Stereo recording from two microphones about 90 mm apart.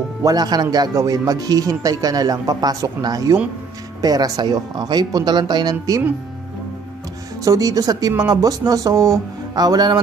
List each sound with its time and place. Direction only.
0.2 s speech: 45° right (ahead or behind)
7.4 s speech: 40° right (ahead or behind)